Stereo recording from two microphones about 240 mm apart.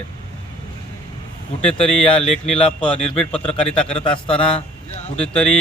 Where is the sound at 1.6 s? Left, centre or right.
Left.